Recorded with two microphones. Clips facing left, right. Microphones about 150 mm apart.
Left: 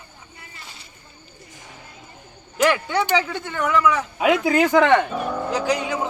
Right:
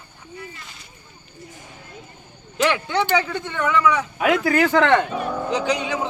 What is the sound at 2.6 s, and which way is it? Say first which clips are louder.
Speech: left 1 dB; 10° left (ahead or behind).